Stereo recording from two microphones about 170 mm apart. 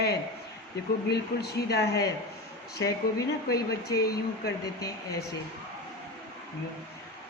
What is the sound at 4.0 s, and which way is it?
Speech, 65° left (ahead or behind).